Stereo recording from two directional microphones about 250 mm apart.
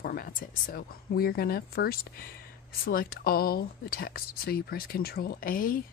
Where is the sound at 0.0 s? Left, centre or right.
Left.